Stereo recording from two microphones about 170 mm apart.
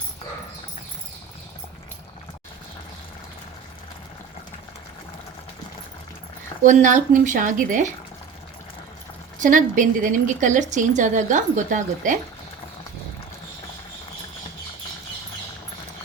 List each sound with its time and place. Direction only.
6.6 s speech: 50° right (ahead or behind)
9.4 s speech: 50° right (ahead or behind)